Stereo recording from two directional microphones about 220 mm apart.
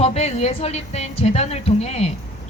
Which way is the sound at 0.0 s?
30° left (ahead or behind).